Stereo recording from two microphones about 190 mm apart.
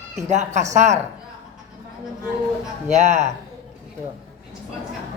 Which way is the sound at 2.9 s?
35° right (ahead or behind).